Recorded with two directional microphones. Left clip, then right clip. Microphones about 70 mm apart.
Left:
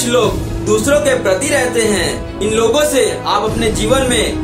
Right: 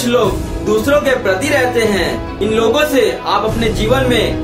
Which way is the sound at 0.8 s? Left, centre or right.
Centre.